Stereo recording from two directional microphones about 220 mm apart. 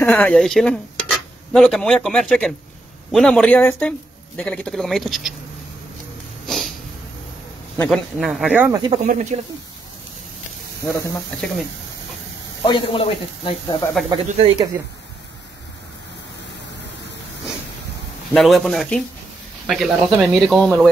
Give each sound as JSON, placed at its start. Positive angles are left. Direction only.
{"t": 0.0, "sound": "speech", "side_deg": 10}
{"t": 6.4, "sound": "snort", "side_deg": 0}
{"t": 7.7, "sound": "a man's voice", "side_deg": 10}
{"t": 8.2, "sound": "speech", "side_deg": 0}
{"t": 9.0, "sound": "speech", "side_deg": -35}
{"t": 12.6, "sound": "speech", "side_deg": 20}
{"t": 14.0, "sound": "speech", "side_deg": -25}
{"t": 18.3, "sound": "speech", "side_deg": 0}